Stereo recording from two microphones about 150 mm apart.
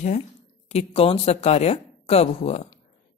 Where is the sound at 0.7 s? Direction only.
45° left (ahead or behind).